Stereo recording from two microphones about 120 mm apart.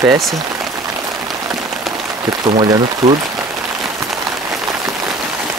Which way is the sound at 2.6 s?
40° right (ahead or behind).